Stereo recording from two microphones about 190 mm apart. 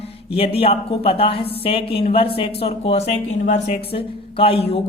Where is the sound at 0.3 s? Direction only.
30° left (ahead or behind).